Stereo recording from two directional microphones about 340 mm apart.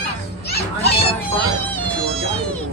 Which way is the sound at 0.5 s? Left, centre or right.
Left.